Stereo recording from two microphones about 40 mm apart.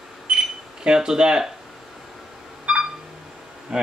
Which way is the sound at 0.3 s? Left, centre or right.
Centre.